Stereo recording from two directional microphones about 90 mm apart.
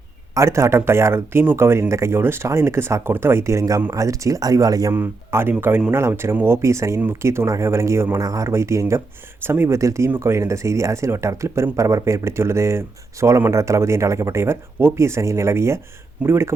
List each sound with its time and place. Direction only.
0.3 s speech: 30° right (ahead or behind)
4.9 s speech: 25° right (ahead or behind)